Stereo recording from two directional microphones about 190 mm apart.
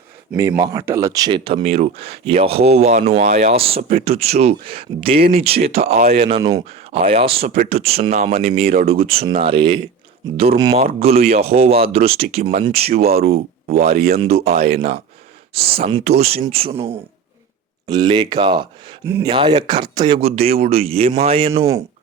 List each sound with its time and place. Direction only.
0.3 s speech: 15° right (ahead or behind); by 8.9 s 45° right (ahead or behind)
8.9 s speech: 30° right (ahead or behind)
13.9 s speech: 55° right (ahead or behind)
14.2 s speech: 35° right (ahead or behind)
17.8 s speech: 20° right (ahead or behind)
19.0 s speech: 15° right (ahead or behind)
19.3 s speech: 25° right (ahead or behind)
21.5 s speech: 15° right (ahead or behind)